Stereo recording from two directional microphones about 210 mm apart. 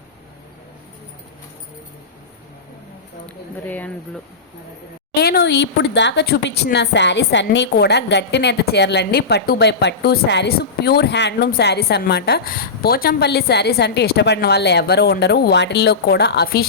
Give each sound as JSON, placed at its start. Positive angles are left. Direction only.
{"t": 3.7, "sound": "speech", "side_deg": 10}
{"t": 5.1, "sound": "a woman's voice", "side_deg": 50}